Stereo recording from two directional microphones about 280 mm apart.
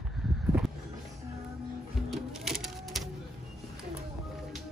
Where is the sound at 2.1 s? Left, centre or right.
Centre.